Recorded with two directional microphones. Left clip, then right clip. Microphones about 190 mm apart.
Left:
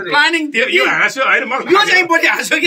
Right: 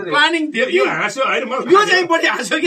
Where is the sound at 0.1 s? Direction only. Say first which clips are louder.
Left 2 dB; centre (ahead or behind).